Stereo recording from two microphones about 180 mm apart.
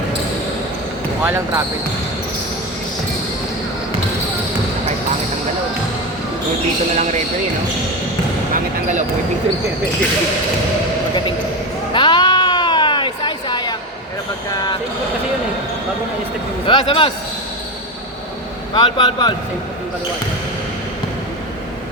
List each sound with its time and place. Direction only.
1.2 s speech: 10° right (ahead or behind)
6.9 s speech: 40° right (ahead or behind)
8.5 s basketball bounce: 45° right (ahead or behind)
11.9 s a sound: 25° left (ahead or behind)
16.6 s speech: 30° left (ahead or behind)
18.7 s speech: 25° left (ahead or behind)